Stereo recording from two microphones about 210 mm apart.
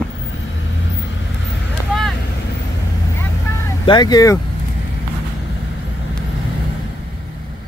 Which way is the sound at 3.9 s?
20° left (ahead or behind).